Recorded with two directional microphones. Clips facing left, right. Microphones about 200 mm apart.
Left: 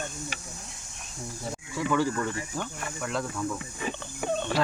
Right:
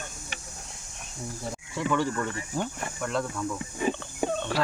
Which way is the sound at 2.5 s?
20° right (ahead or behind).